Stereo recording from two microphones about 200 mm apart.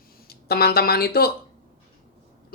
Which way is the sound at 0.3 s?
50° left (ahead or behind).